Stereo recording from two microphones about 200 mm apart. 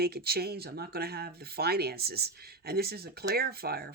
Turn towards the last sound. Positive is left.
turn(degrees=-50)  # may be behind; listen again after turning